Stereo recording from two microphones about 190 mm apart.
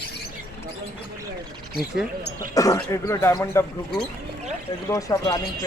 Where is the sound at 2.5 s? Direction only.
15° left (ahead or behind).